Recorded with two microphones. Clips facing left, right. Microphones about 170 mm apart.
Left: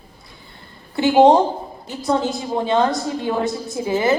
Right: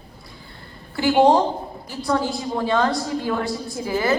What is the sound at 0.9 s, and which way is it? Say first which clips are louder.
A woman's voice: left 3 dB; 20° left (ahead or behind).